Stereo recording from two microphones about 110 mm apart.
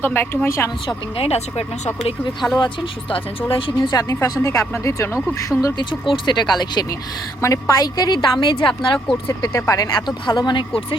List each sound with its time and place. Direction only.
0.0 s a woman's voice: 20° left (ahead or behind)
1.1 s speech: 70° left (ahead or behind)
2.6 s speech: 50° left (ahead or behind)
3.8 s a woman's voice: 35° left (ahead or behind)
7.4 s a woman's voice: 30° left (ahead or behind); by 9.0 s 45° left (ahead or behind)
9.4 s a woman's voice: 30° left (ahead or behind)
10.2 s speech: 45° left (ahead or behind)